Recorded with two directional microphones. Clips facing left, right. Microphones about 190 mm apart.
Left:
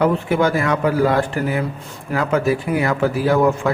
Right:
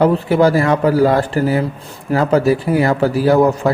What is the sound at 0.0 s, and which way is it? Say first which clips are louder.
A man's voice: right 4 dB; 35° right (ahead or behind).